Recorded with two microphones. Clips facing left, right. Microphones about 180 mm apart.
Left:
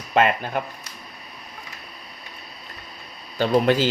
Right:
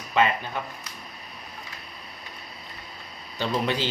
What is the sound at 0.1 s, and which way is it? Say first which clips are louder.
Speech: left 4 dB; 50° left (ahead or behind).